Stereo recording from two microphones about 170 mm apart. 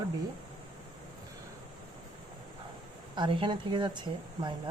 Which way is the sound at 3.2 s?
30° right (ahead or behind).